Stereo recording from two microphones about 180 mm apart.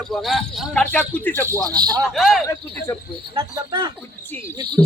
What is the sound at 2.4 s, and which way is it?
Speech, 15° left (ahead or behind).